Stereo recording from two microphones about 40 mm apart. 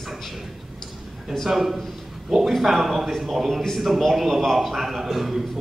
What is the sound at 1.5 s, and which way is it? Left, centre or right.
A man's voice, centre.